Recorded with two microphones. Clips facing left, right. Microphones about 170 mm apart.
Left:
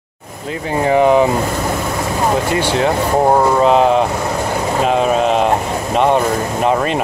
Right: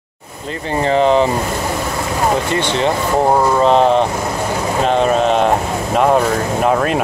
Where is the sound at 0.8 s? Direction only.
10° left (ahead or behind).